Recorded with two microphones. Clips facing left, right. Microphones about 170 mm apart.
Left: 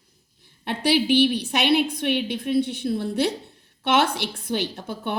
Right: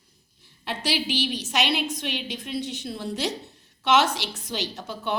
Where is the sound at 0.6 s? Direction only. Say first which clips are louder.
Left 7 dB; 55° left (ahead or behind).